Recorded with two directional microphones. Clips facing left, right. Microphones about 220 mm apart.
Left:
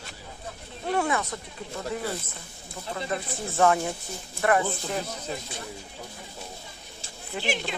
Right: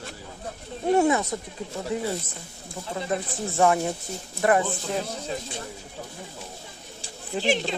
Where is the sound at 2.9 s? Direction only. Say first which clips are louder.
Right 3 dB; 20° right (ahead or behind).